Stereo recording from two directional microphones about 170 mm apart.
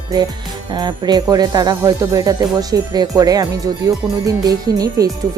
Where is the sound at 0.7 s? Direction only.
25° right (ahead or behind).